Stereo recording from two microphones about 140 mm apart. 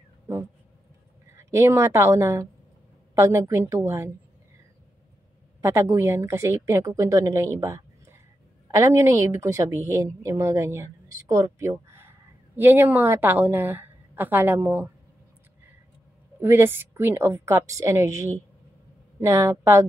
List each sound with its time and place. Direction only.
1.3 s a woman's voice: 20° right (ahead or behind)
5.6 s a woman's voice: 20° right (ahead or behind)
16.3 s a woman's voice: 15° right (ahead or behind)